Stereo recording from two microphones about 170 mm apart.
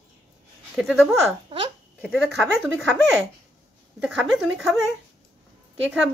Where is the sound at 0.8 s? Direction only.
Centre (ahead or behind).